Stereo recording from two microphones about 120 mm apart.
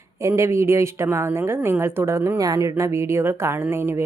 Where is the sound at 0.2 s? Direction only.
25° right (ahead or behind).